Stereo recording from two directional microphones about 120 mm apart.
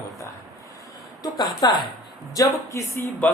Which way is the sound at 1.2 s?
35° left (ahead or behind).